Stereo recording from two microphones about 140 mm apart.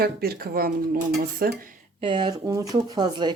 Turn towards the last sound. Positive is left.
turn(degrees=-30)  # may be behind; listen again after turning